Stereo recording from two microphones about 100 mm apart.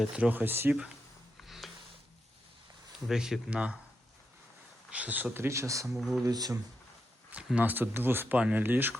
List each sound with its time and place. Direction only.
0.0 s speech: 15° right (ahead or behind)
1.4 s snort: centre (ahead or behind)
3.1 s speech: 5° right (ahead or behind)
4.9 s speech: 15° right (ahead or behind); by 5.9 s 30° right (ahead or behind)
5.9 s speech: centre (ahead or behind)
6.2 s speech: 40° right (ahead or behind)
7.3 s speech: 15° right (ahead or behind)